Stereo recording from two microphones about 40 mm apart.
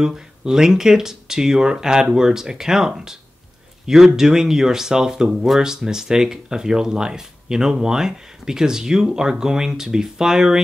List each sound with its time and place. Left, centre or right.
0.0 s speech: centre